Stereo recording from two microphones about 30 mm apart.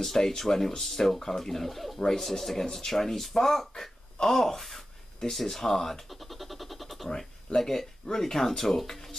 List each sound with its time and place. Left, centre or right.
0.0 s speech: centre
2.0 s speech: centre
6.0 s a sound: centre
7.6 s speech: centre